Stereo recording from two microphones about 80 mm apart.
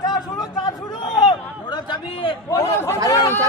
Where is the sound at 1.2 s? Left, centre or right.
Left.